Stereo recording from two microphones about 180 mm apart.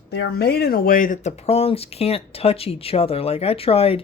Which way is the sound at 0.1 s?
65° left (ahead or behind).